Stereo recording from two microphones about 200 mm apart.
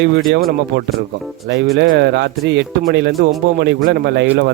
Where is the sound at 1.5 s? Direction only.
55° right (ahead or behind).